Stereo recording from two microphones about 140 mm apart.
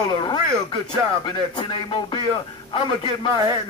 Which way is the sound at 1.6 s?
35° left (ahead or behind).